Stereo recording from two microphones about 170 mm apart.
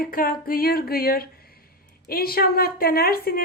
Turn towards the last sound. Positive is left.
turn(degrees=65)  # may be behind; listen again after turning